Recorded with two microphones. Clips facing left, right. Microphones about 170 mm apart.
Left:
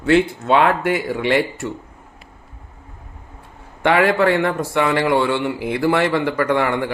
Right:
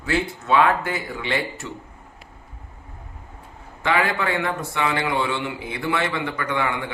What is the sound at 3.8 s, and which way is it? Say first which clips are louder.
A man's voice: left 7 dB; 65° left (ahead or behind).